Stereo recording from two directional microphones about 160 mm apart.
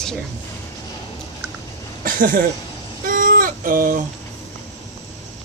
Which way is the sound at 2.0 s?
60° right (ahead or behind).